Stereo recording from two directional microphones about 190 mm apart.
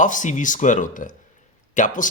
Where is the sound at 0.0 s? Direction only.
40° left (ahead or behind).